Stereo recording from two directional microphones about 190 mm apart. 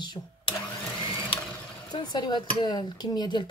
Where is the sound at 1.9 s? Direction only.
20° left (ahead or behind).